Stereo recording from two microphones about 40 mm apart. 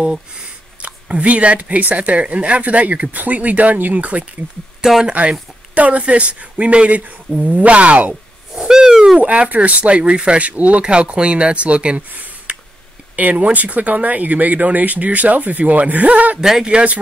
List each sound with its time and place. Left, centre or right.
0.7 s speech: right
4.8 s speech: centre
5.8 s speech: right
8.5 s owl: centre
9.2 s speech: right
12.1 s a sound: right
13.1 s speech: right
16.3 s speech: centre
16.6 s speech: right